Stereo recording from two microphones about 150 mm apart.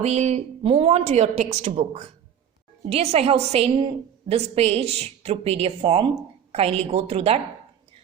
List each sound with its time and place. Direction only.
0.0 s a woman's voice: 50° right (ahead or behind)